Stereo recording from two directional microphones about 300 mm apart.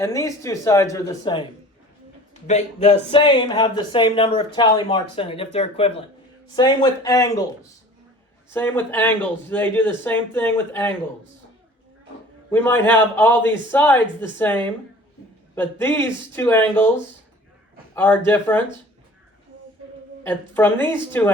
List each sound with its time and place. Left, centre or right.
0.0 s speech: centre
2.5 s speech: left
8.5 s speech: centre
12.5 s speech: centre
17.9 s speech: centre
20.2 s speech: centre